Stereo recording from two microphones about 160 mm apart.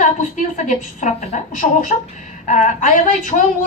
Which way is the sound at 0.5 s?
50° left (ahead or behind).